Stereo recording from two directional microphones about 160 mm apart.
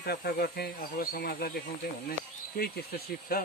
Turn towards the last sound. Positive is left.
turn(degrees=65)  # may be behind; listen again after turning